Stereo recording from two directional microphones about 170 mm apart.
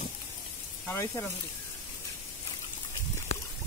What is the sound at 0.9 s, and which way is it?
Speech, 15° left (ahead or behind).